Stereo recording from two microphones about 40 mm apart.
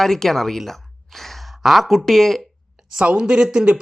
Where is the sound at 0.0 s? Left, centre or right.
Centre.